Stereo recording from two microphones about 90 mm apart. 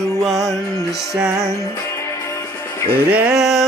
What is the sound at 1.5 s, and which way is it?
Music, 30° left (ahead or behind).